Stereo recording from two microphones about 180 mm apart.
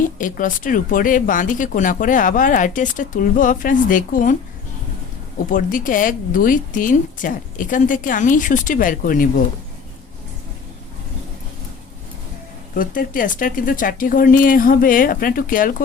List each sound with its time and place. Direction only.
0.2 s speech: 45° left (ahead or behind)
5.5 s speech: 50° left (ahead or behind)
12.7 s speech: 50° left (ahead or behind)